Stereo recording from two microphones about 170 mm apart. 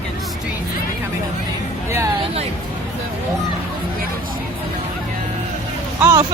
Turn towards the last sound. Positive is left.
turn(degrees=-15)  # may be behind; listen again after turning